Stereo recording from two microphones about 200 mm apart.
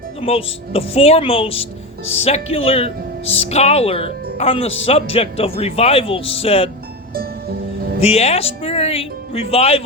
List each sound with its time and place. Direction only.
0.2 s speech: 30° left (ahead or behind)
7.1 s music: 50° right (ahead or behind)
8.0 s speech: 30° left (ahead or behind)